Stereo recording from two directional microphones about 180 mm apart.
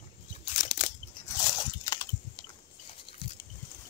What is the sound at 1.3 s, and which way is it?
Biting, 20° left (ahead or behind).